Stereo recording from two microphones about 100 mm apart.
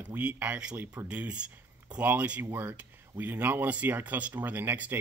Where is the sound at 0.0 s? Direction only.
15° right (ahead or behind).